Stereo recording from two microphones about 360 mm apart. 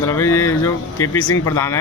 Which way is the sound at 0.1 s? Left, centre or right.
Centre.